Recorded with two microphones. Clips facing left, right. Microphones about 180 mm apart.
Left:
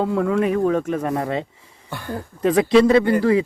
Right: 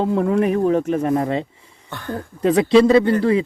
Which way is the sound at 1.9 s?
10° left (ahead or behind).